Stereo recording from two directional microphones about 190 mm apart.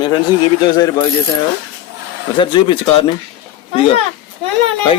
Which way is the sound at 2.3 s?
25° left (ahead or behind).